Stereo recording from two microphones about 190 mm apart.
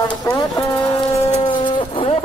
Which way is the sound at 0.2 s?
15° left (ahead or behind).